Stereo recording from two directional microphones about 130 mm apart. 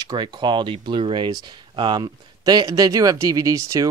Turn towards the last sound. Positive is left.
turn(degrees=-25)  # may be behind; listen again after turning